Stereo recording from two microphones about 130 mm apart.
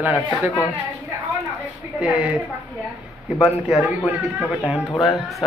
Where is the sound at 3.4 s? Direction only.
50° left (ahead or behind).